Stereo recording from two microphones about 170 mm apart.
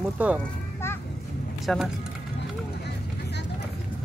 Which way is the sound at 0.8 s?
15° left (ahead or behind).